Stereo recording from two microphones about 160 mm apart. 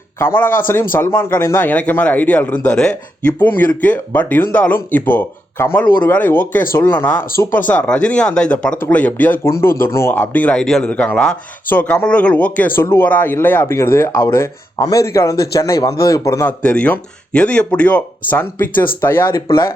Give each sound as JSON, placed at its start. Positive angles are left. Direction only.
{"t": 0.2, "sound": "speech", "side_deg": 15}
{"t": 7.3, "sound": "speech", "side_deg": 60}
{"t": 7.7, "sound": "speech", "side_deg": 5}